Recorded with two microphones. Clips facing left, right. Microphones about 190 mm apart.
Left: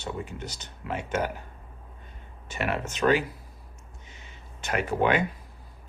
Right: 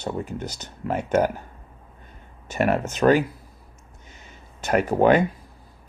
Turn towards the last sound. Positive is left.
turn(degrees=-40)  # may be behind; listen again after turning